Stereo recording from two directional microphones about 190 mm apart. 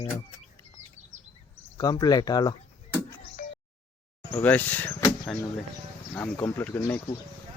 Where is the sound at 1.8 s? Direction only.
20° left (ahead or behind).